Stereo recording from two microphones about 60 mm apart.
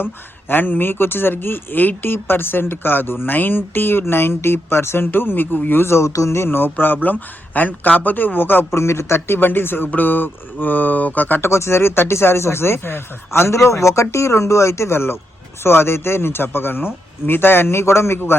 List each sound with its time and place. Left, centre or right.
0.0 s speech: left
8.7 s speech: left
11.4 s speech: left